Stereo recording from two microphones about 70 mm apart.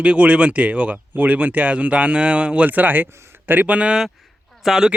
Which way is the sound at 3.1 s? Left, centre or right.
Right.